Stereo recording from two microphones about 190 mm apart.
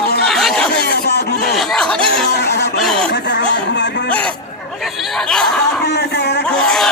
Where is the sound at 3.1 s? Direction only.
65° left (ahead or behind).